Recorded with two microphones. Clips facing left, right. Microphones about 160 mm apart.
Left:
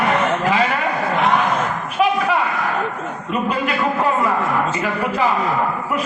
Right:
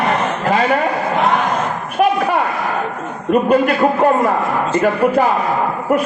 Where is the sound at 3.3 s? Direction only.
50° right (ahead or behind).